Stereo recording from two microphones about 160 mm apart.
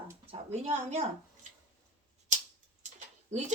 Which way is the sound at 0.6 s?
45° right (ahead or behind).